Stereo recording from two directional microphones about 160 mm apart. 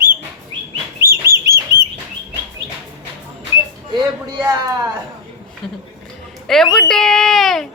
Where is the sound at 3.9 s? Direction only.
25° right (ahead or behind).